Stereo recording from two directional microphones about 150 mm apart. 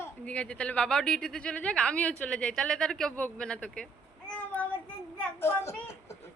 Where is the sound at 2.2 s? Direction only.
10° left (ahead or behind).